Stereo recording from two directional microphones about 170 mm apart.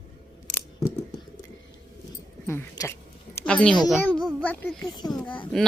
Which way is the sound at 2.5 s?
15° left (ahead or behind).